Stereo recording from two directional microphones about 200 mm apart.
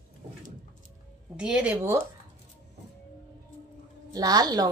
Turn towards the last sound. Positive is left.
turn(degrees=-20)  # may be behind; listen again after turning